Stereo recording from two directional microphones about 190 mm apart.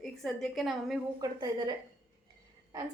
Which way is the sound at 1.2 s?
20° right (ahead or behind).